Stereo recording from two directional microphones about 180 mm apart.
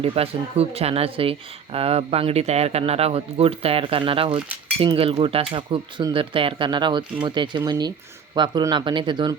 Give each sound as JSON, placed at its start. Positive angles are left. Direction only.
{"t": 0.0, "sound": "speech", "side_deg": -35}